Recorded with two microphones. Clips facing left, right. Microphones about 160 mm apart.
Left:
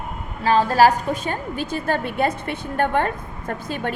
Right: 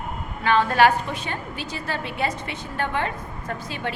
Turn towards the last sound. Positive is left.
turn(degrees=50)  # may be behind; listen again after turning